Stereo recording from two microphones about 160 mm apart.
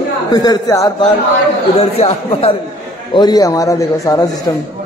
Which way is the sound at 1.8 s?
40° left (ahead or behind).